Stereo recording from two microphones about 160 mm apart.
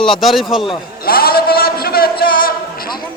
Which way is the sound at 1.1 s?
70° left (ahead or behind).